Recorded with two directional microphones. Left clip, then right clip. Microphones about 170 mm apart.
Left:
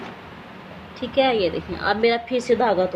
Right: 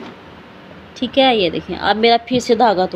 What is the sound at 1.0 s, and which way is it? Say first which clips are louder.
Speech: right 6 dB; 55° right (ahead or behind).